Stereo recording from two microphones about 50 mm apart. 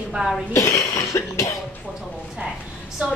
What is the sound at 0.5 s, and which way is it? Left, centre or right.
Cough, left.